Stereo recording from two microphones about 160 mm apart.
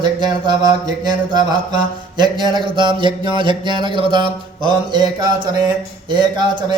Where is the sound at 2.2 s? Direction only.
25° right (ahead or behind).